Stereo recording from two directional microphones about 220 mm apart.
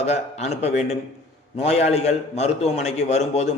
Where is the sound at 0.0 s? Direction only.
30° left (ahead or behind).